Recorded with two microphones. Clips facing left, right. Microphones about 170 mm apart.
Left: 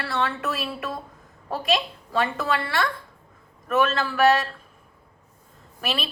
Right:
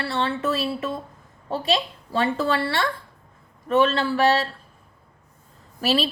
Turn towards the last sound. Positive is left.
turn(degrees=-35)  # may be behind; listen again after turning